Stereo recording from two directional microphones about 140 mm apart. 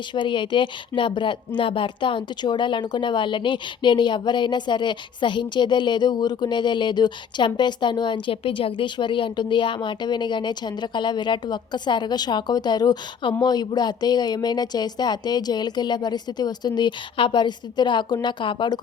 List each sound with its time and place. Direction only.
0.1 s speech: 35° left (ahead or behind)